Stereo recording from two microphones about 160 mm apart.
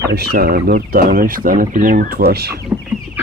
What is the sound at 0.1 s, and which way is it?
Speech, 80° right.